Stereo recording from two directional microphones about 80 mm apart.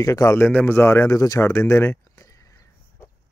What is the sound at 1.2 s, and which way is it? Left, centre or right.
Speech, left.